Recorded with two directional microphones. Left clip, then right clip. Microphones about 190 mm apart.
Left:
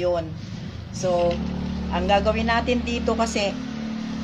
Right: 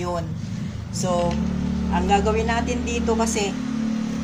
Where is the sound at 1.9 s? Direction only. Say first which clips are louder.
Even; 50° left (ahead or behind).